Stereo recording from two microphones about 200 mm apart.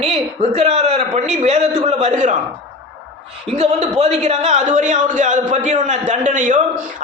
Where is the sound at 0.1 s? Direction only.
35° right (ahead or behind).